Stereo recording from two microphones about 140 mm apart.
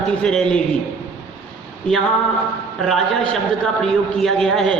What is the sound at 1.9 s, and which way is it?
A man's voice, 10° left (ahead or behind).